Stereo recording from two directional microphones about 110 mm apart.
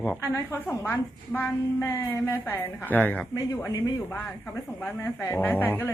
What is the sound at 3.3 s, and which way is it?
Speech, 30° left (ahead or behind).